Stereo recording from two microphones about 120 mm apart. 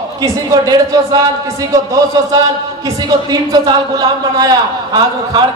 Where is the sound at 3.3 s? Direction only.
35° right (ahead or behind).